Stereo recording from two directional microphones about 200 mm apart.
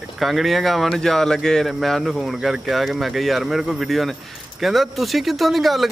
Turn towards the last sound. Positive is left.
turn(degrees=0)  # may be behind; listen again after turning